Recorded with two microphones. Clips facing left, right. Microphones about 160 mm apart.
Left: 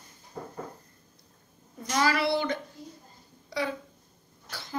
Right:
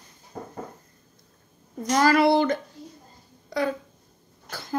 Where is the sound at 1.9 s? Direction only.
45° right (ahead or behind).